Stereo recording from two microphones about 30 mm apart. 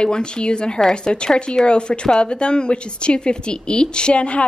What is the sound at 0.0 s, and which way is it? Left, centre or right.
A woman's voice, left.